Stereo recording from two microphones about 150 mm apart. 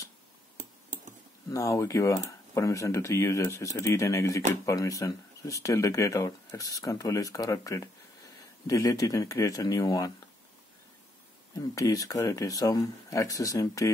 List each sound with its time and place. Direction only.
0.6 s a sound: 55° right (ahead or behind)
1.5 s speech: 20° left (ahead or behind)
11.5 s speech: 25° left (ahead or behind)